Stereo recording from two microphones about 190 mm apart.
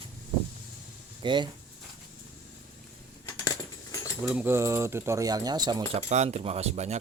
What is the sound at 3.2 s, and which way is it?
Coin, 20° left (ahead or behind).